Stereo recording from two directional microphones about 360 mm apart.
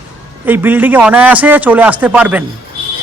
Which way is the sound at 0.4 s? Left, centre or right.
Centre.